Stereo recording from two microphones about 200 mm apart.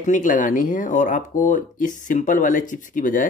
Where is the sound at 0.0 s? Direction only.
40° left (ahead or behind).